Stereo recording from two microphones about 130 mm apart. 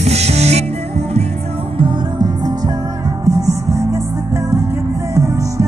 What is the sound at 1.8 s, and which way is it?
Music, 35° right (ahead or behind).